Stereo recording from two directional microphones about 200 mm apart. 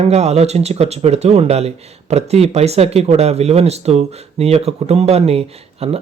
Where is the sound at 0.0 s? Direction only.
30° right (ahead or behind).